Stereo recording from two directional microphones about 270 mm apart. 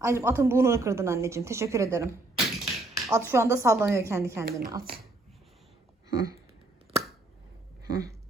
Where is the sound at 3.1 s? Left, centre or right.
Centre.